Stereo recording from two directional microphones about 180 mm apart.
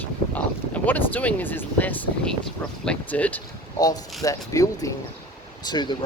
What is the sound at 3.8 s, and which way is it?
Speech, 20° left (ahead or behind).